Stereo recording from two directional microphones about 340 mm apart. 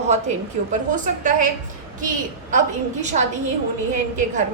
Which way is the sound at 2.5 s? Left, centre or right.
Right.